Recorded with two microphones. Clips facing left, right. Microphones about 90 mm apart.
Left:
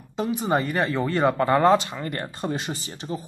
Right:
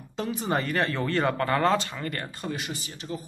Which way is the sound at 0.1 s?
15° left (ahead or behind).